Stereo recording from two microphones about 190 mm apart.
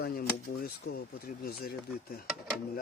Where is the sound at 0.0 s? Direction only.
55° left (ahead or behind).